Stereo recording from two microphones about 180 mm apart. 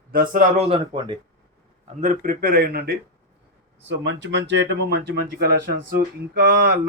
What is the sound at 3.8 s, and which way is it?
Speech, 90° right.